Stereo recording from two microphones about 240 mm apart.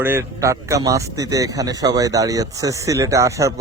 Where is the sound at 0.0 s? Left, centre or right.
Centre.